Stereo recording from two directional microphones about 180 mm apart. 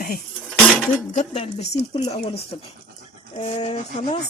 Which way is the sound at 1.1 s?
35° left (ahead or behind).